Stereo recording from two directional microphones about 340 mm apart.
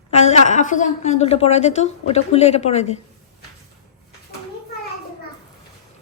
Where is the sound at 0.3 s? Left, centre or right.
Left.